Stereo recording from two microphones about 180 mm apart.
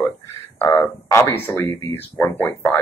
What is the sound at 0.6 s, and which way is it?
Speech, 15° left (ahead or behind).